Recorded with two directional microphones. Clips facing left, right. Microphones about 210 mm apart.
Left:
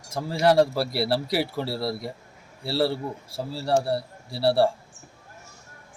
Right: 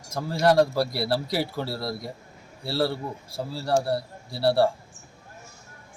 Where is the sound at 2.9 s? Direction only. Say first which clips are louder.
Left 2 dB; 30° left (ahead or behind).